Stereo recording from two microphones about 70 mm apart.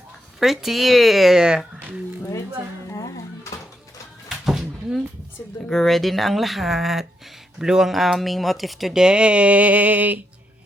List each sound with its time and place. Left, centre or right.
0.3 s speech: centre
2.9 s music: left
4.4 s a sound: centre
5.6 s speech: centre; by 10.2 s right